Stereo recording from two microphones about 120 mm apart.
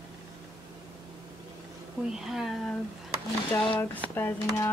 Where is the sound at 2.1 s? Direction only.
5° right (ahead or behind).